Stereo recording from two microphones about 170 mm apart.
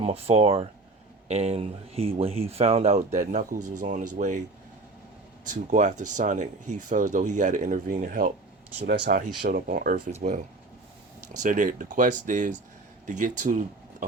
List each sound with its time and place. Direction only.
0.0 s speech: 35° right (ahead or behind)
5.5 s speech: 45° right (ahead or behind)
8.8 s speech: 80° right
9.5 s speech: 55° right (ahead or behind)
10.1 s speech: 40° right (ahead or behind)
11.4 s speech: 50° right (ahead or behind)